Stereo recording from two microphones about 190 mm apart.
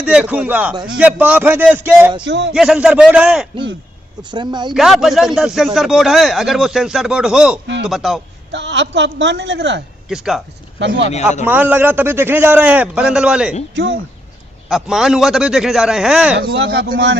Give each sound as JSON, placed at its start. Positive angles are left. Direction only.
{"t": 0.0, "sound": "a man's voice", "side_deg": -5}
{"t": 4.2, "sound": "speech", "side_deg": -25}
{"t": 4.7, "sound": "speech", "side_deg": 0}
{"t": 8.5, "sound": "a woman's voice", "side_deg": -70}
{"t": 10.1, "sound": "speech", "side_deg": -5}
{"t": 10.8, "sound": "speech", "side_deg": -75}
{"t": 11.4, "sound": "a man's voice", "side_deg": -10}
{"t": 14.7, "sound": "speech", "side_deg": 0}
{"t": 16.4, "sound": "speech", "side_deg": -60}